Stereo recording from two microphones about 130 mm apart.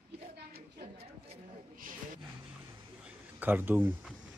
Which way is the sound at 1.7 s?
90° right.